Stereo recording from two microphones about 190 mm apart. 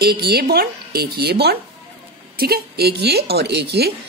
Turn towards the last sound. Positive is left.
turn(degrees=-60)  # may be behind; listen again after turning